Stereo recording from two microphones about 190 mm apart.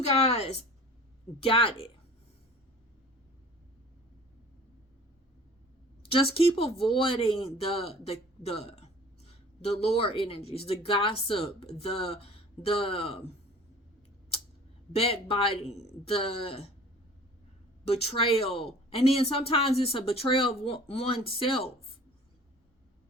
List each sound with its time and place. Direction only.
0.0 s speech: 30° left (ahead or behind)
6.0 s speech: 30° left (ahead or behind)
14.9 s speech: 30° left (ahead or behind)
17.8 s speech: 35° left (ahead or behind)